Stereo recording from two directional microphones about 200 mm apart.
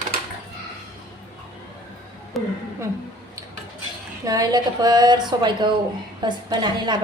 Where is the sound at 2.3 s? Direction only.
Centre (ahead or behind).